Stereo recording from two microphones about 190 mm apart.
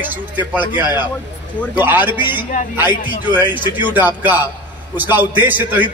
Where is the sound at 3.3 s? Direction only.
10° right (ahead or behind).